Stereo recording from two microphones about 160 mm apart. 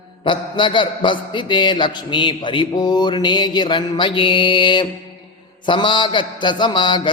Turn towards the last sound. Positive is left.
turn(degrees=30)  # may be behind; listen again after turning